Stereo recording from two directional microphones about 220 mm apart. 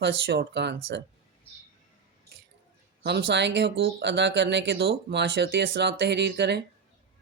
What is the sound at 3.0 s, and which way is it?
Music, 50° right (ahead or behind).